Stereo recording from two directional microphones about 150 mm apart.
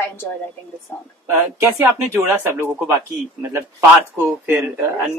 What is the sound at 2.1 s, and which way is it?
Speech, 15° right (ahead or behind).